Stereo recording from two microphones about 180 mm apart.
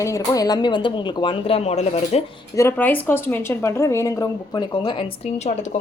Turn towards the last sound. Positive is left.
turn(degrees=30)  # may be behind; listen again after turning